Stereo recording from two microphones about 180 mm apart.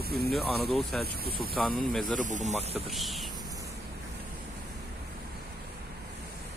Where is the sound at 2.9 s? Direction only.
Centre (ahead or behind).